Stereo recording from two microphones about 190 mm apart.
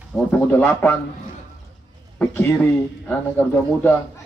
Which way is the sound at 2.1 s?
10° left (ahead or behind).